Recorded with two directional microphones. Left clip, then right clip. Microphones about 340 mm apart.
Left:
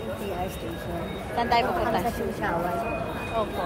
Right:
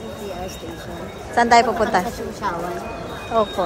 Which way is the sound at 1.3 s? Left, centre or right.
Right.